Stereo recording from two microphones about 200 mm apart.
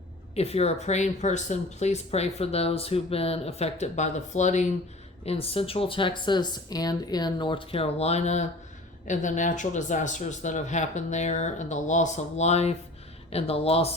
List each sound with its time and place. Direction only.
0.3 s speech: 30° left (ahead or behind)